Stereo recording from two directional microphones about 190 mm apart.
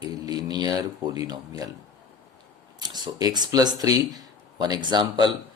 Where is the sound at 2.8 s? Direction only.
20° right (ahead or behind).